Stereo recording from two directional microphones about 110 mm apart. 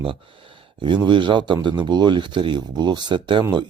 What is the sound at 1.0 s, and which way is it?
Speech, 50° right (ahead or behind).